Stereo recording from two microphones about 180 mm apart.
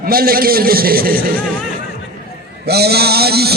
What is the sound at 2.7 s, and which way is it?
Speech, 60° right (ahead or behind).